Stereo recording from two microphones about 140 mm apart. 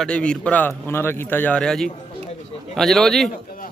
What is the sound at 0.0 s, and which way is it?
A man's voice, 5° left (ahead or behind).